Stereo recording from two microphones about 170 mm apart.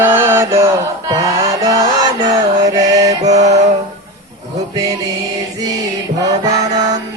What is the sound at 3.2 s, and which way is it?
Mantra, 40° right (ahead or behind).